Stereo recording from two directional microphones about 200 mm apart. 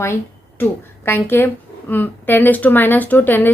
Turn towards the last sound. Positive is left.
turn(degrees=10)  # may be behind; listen again after turning